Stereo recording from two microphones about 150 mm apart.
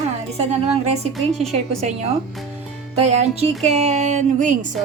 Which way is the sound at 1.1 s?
Centre (ahead or behind).